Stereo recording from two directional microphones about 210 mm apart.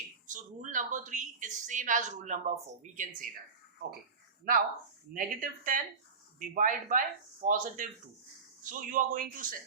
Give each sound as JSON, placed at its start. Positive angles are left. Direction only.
{"t": 0.3, "sound": "a woman's voice", "side_deg": -35}
{"t": 5.1, "sound": "a woman's voice", "side_deg": -40}